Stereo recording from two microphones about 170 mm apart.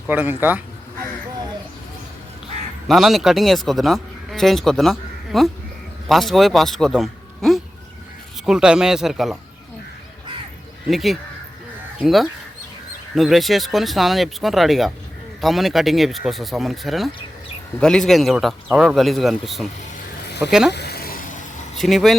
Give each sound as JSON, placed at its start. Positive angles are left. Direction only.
{"t": 0.1, "sound": "a man's voice", "side_deg": -10}
{"t": 2.8, "sound": "a man's voice", "side_deg": 0}
{"t": 10.8, "sound": "speech", "side_deg": 0}
{"t": 20.7, "sound": "a sound", "side_deg": 70}
{"t": 21.8, "sound": "speech", "side_deg": 0}